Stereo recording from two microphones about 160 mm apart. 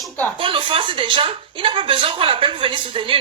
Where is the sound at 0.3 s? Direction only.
35° right (ahead or behind).